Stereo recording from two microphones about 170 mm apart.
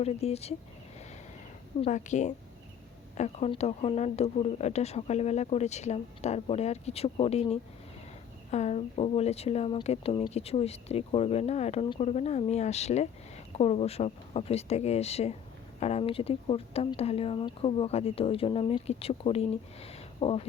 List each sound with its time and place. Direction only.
0.0 s speech: 40° left (ahead or behind)
1.8 s a woman's voice: 45° left (ahead or behind)